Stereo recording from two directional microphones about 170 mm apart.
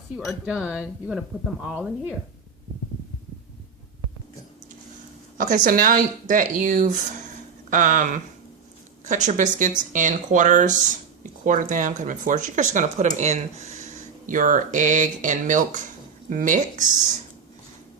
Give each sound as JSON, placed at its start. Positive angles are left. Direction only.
{"t": 0.3, "sound": "speech", "side_deg": -5}
{"t": 5.4, "sound": "speech", "side_deg": -50}